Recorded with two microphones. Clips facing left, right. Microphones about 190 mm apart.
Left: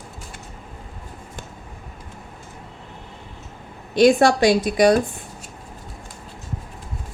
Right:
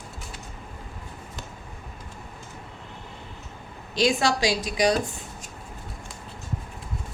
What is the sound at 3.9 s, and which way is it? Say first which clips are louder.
A woman's voice: left 8 dB; 55° left (ahead or behind).